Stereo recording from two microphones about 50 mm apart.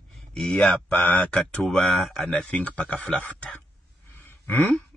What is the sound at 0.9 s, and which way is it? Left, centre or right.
Speech, left.